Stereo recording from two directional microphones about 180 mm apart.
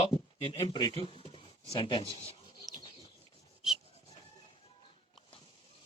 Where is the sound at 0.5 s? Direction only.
20° left (ahead or behind).